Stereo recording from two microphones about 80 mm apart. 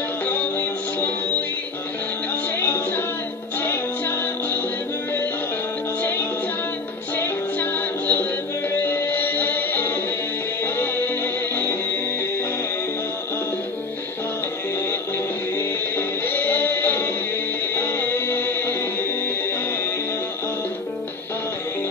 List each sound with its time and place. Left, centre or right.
0.2 s music: left
2.6 s music: left
7.2 s music: left
15.5 s music: left